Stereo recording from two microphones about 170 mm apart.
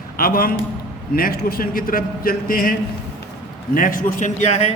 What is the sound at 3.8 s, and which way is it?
Speech, 55° left (ahead or behind).